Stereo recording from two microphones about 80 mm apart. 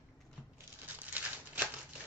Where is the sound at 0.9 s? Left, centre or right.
Right.